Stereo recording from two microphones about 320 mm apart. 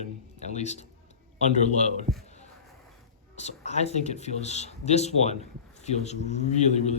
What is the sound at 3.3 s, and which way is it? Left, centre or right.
Speech, left.